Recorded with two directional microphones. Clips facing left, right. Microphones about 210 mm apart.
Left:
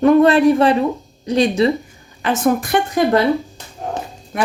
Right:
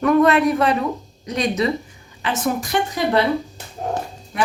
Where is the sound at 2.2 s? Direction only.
55° left (ahead or behind).